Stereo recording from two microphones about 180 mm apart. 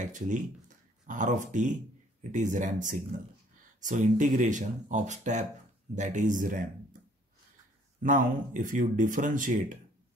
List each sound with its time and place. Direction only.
0.0 s speech: 45° right (ahead or behind)
8.0 s speech: 45° right (ahead or behind)